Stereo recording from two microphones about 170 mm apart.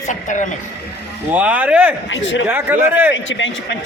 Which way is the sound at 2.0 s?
90° left.